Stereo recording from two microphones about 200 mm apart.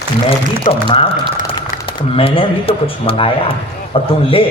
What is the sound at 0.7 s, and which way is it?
A man's voice, 30° left (ahead or behind).